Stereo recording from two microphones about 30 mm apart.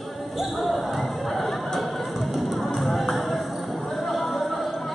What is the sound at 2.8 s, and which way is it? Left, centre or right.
Music, centre.